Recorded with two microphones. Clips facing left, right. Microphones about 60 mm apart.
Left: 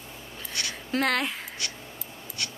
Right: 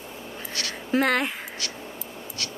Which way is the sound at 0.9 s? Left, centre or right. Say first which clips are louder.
Right 4 dB; centre.